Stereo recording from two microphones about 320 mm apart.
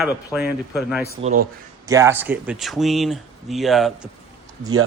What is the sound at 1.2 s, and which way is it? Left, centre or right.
A man's voice, centre.